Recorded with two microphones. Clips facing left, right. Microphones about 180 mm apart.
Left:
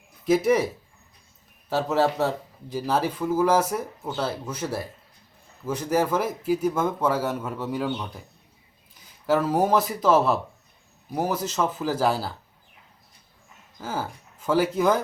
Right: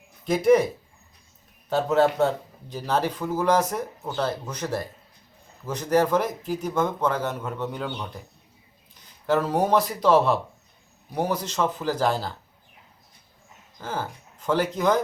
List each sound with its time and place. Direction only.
0.3 s speech: 5° left (ahead or behind)
1.7 s speech: 5° left (ahead or behind)
13.8 s speech: 5° left (ahead or behind)